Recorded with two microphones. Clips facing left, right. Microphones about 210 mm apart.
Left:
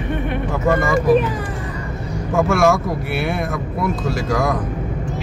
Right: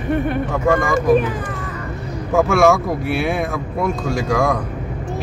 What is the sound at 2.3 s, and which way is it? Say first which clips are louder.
Speech: right 2 dB; centre (ahead or behind).